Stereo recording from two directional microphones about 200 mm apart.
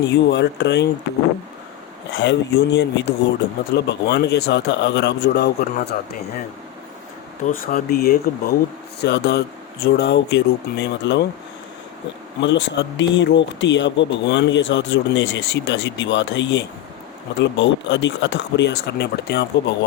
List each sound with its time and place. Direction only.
0.0 s speech: 60° left (ahead or behind)
2.1 s speech: 60° left (ahead or behind)
7.4 s speech: 45° left (ahead or behind); by 11.3 s 60° left (ahead or behind)
12.4 s speech: 65° left (ahead or behind)